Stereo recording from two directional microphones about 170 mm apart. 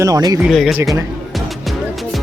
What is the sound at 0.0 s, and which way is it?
Speech, 20° right (ahead or behind).